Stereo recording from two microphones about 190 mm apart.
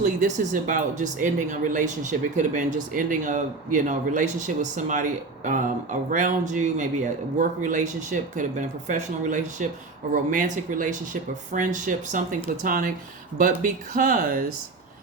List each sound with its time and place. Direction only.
0.0 s speech: 40° right (ahead or behind)